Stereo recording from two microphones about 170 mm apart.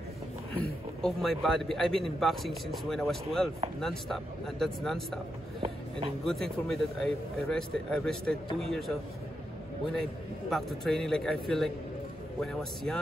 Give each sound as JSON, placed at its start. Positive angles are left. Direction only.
{"t": 1.0, "sound": "a man's voice", "side_deg": 0}
{"t": 5.6, "sound": "speech", "side_deg": -30}
{"t": 6.2, "sound": "a man's voice", "side_deg": 0}
{"t": 10.5, "sound": "a man's voice", "side_deg": 0}